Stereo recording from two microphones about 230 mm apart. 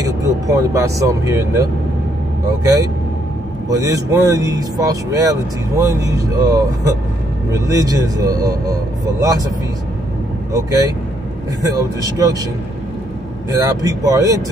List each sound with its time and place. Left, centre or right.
0.0 s speech: centre
3.6 s speech: centre
10.5 s speech: centre
13.5 s speech: centre